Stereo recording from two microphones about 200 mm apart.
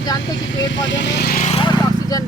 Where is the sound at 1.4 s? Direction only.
25° left (ahead or behind).